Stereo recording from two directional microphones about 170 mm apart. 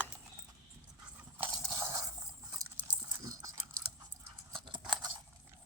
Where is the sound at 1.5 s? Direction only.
15° right (ahead or behind).